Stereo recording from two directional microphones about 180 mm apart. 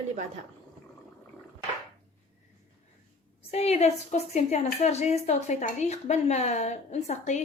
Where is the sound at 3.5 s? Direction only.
35° left (ahead or behind).